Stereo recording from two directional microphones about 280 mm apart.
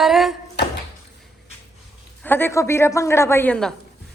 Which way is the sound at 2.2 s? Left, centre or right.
Centre.